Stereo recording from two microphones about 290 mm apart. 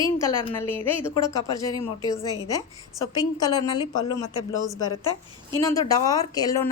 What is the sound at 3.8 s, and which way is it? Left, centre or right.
Speech, centre.